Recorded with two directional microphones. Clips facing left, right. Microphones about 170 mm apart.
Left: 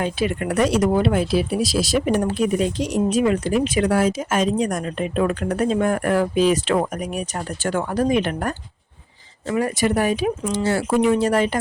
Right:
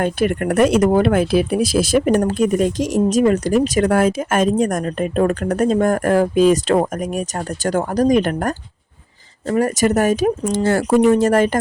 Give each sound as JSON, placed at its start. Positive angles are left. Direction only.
{"t": 0.0, "sound": "speech", "side_deg": -50}